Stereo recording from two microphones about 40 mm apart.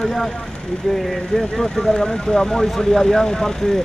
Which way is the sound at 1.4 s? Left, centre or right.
Centre.